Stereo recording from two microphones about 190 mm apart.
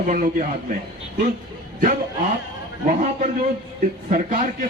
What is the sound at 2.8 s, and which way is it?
A man's voice, 40° right (ahead or behind).